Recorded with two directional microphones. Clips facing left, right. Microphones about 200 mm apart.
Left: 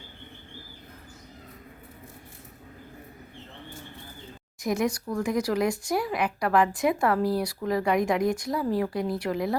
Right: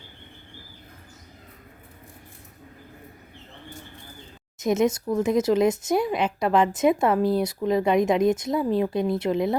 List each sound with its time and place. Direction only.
4.6 s speech: 20° right (ahead or behind)